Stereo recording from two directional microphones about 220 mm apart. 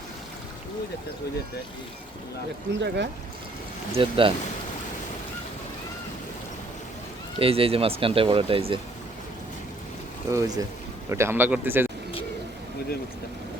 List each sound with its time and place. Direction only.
2.8 s speech: 50° right (ahead or behind)
3.9 s speech: 25° right (ahead or behind)
7.3 s speech: 25° right (ahead or behind)
10.2 s speech: 15° right (ahead or behind)